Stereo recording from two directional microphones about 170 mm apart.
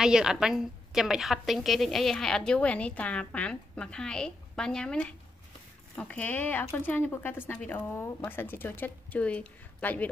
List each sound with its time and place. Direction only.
0.0 s a woman's voice: 5° right (ahead or behind)